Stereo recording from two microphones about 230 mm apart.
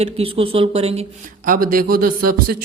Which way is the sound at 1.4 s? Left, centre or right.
Right.